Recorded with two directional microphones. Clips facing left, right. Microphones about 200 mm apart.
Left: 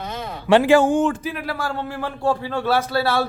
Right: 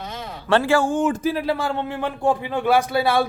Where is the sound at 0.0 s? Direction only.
50° left (ahead or behind).